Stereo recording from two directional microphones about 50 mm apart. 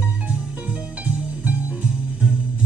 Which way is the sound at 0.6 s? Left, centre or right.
Right.